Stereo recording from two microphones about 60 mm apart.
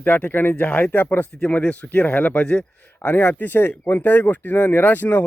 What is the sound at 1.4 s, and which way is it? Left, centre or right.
Speech, left.